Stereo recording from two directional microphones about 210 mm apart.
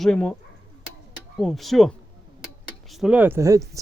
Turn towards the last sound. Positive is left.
turn(degrees=-15)  # may be behind; listen again after turning